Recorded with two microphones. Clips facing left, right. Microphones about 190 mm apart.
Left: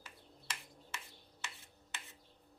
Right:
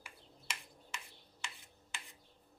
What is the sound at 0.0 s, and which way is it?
Bird, 10° right (ahead or behind).